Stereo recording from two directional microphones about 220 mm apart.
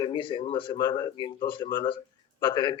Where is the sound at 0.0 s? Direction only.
20° left (ahead or behind).